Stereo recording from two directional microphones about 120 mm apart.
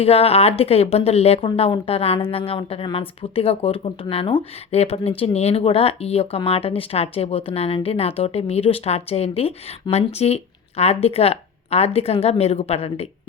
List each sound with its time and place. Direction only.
0.0 s speech: 60° left (ahead or behind)
1.5 s speech: 45° left (ahead or behind)
4.7 s speech: 60° left (ahead or behind)